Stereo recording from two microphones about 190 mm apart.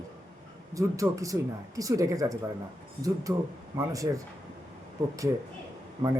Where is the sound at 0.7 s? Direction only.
15° right (ahead or behind).